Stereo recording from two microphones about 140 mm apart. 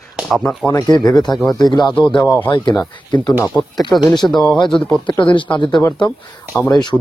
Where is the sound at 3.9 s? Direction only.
30° left (ahead or behind).